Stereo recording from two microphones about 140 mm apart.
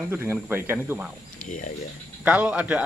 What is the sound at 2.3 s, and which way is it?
Speech, 10° right (ahead or behind).